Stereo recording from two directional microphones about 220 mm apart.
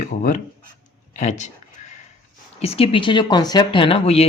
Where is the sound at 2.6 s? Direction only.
25° left (ahead or behind).